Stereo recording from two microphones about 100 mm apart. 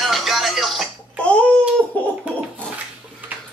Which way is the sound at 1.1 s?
10° left (ahead or behind).